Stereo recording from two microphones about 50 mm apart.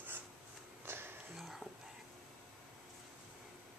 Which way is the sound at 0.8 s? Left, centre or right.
Right.